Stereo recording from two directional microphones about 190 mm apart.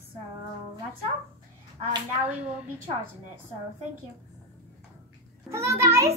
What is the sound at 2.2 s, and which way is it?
Speech, 5° right (ahead or behind).